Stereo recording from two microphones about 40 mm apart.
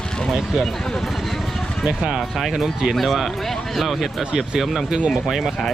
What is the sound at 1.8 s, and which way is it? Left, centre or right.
Speech, centre.